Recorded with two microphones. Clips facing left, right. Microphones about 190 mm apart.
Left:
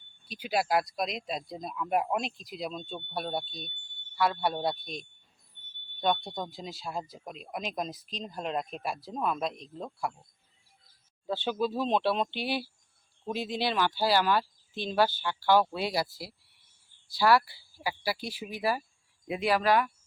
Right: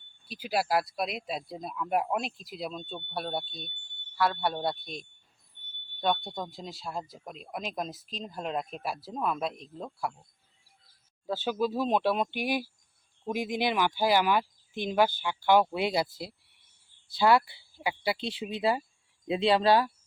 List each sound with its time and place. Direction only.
0.3 s speech: centre (ahead or behind)
6.2 s speech: centre (ahead or behind)
11.3 s speech: 5° right (ahead or behind)
17.2 s speech: 20° right (ahead or behind)